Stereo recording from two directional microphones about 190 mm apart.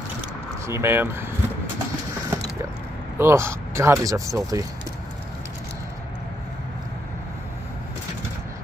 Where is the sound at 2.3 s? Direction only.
15° right (ahead or behind).